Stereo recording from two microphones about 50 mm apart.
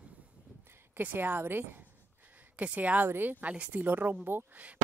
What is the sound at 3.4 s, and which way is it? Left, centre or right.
Speech, right.